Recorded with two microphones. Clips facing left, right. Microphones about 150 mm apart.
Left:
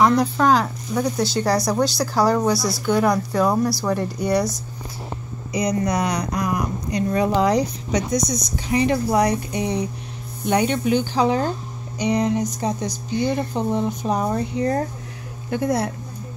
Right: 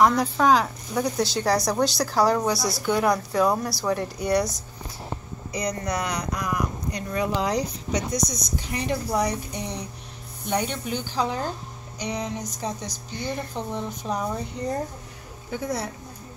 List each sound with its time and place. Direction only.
0.0 s speech: centre (ahead or behind)
5.5 s speech: 10° left (ahead or behind)
7.1 s speech: 40° left (ahead or behind)
7.4 s speech: 75° left (ahead or behind)
12.0 s a sound: 65° left (ahead or behind)
14.0 s speech: 65° left (ahead or behind)
15.5 s a sound: 60° left (ahead or behind)